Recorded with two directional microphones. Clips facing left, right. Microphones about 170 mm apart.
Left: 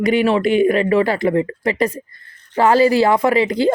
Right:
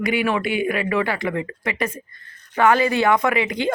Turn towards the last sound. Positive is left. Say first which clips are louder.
# left 6 dB
turn(degrees=35)  # may be behind; listen again after turning